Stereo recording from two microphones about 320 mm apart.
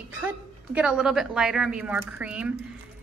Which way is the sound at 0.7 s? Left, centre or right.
Centre.